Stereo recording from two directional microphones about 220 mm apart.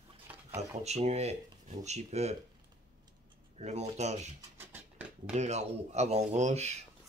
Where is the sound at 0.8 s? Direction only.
30° right (ahead or behind).